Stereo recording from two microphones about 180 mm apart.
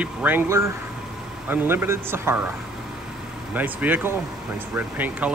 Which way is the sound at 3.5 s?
10° right (ahead or behind).